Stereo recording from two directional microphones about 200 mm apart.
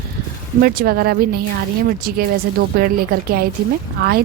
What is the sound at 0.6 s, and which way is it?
A woman's voice, 50° right (ahead or behind).